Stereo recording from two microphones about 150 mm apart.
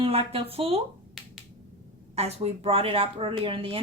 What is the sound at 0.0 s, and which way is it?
Speech, 40° right (ahead or behind).